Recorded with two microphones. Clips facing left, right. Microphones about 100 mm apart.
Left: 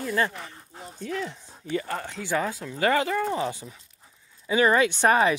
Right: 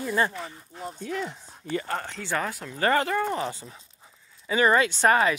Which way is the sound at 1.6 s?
10° left (ahead or behind).